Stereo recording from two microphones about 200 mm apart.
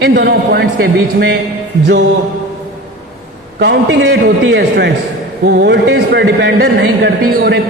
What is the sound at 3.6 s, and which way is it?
A man's voice, 60° right (ahead or behind).